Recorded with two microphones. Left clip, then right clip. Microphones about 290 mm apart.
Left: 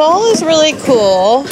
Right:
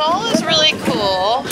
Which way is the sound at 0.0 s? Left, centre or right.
Left.